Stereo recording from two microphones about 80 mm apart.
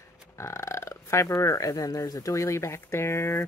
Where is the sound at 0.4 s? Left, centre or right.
Left.